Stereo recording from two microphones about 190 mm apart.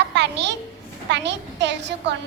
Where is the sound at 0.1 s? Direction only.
65° right (ahead or behind).